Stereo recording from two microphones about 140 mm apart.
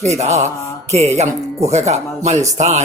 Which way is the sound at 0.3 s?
50° right (ahead or behind).